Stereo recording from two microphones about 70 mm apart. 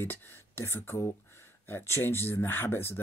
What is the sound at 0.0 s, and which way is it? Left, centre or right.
Speech, left.